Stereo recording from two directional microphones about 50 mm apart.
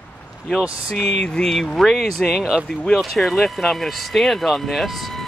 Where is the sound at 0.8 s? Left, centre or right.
Centre.